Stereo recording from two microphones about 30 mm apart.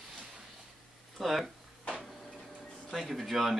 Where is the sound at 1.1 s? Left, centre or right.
Centre.